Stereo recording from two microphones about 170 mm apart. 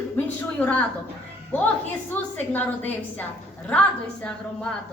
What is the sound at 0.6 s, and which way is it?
Speech, 10° left (ahead or behind).